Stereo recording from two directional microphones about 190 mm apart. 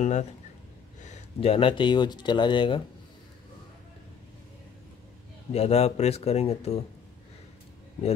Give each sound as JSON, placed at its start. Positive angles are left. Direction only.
{"t": 0.0, "sound": "speech", "side_deg": 35}
{"t": 5.5, "sound": "speech", "side_deg": 35}